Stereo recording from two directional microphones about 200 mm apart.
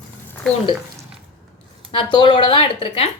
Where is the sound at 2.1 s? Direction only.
25° left (ahead or behind).